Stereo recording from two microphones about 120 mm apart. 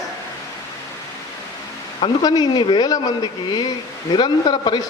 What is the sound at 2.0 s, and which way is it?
A man's voice, 35° left (ahead or behind).